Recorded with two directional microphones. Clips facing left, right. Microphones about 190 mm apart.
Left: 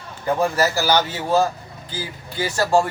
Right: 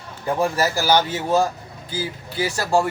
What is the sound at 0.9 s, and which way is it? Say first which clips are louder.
Speech: right 1 dB; 15° right (ahead or behind).